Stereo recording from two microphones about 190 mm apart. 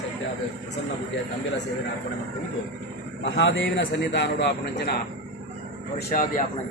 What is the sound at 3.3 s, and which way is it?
A man's voice, 70° left (ahead or behind).